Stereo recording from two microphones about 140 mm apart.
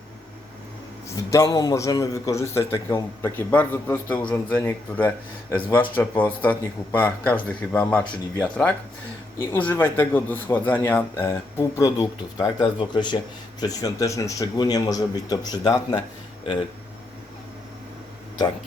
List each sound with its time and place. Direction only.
1.1 s a man's voice: 25° left (ahead or behind)